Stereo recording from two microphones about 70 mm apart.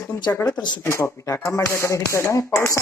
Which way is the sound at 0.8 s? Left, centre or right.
Left.